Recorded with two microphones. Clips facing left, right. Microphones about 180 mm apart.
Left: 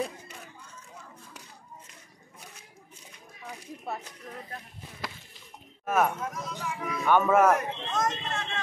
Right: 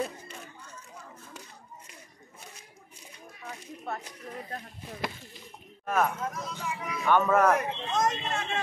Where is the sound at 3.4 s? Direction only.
5° left (ahead or behind).